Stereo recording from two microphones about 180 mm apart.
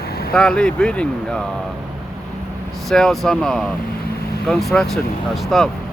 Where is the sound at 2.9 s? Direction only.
Centre (ahead or behind).